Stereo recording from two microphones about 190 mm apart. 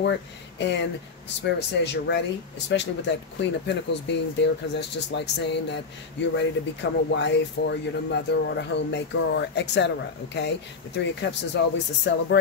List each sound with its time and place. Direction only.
0.6 s speech: 65° left (ahead or behind)